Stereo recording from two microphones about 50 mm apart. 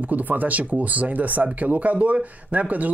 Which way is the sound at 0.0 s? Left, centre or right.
Right.